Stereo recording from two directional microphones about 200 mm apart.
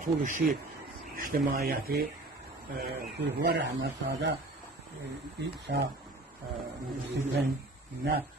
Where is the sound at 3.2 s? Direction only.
60° right (ahead or behind).